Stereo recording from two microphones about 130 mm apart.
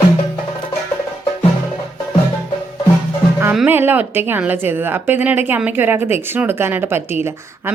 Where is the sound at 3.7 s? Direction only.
15° right (ahead or behind).